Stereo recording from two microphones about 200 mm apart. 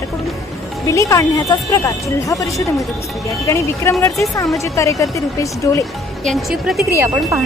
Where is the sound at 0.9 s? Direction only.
15° left (ahead or behind).